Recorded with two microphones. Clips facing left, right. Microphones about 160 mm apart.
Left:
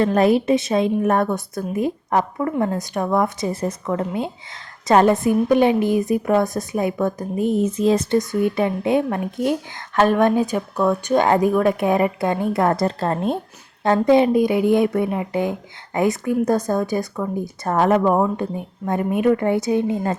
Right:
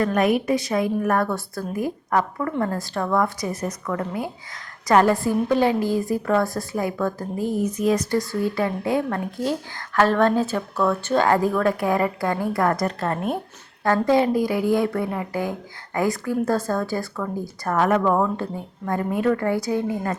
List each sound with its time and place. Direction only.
0.0 s a woman's voice: 30° left (ahead or behind)